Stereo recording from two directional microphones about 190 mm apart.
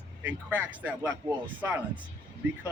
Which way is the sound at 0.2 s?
10° right (ahead or behind).